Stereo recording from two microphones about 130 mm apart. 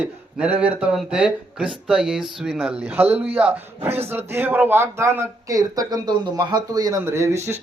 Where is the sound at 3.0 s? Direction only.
15° right (ahead or behind).